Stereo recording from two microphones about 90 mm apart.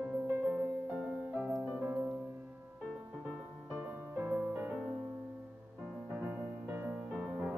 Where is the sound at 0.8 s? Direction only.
10° right (ahead or behind).